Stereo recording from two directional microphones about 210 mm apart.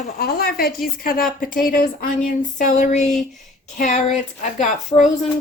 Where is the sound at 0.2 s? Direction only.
45° left (ahead or behind).